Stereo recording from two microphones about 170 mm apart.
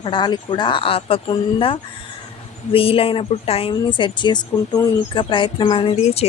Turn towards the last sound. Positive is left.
turn(degrees=35)  # may be behind; listen again after turning